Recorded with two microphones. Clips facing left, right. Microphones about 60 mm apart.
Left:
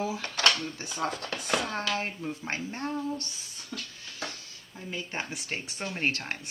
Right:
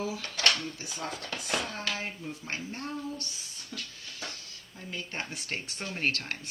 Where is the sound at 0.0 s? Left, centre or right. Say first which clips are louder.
Left 3 dB; left.